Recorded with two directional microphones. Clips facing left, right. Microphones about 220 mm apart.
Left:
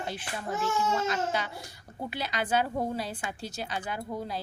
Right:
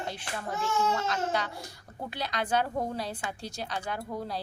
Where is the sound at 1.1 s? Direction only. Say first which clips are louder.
Even; 5° left (ahead or behind).